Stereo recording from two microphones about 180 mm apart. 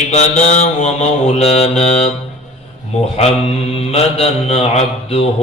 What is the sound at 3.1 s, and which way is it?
Speech, 35° left (ahead or behind).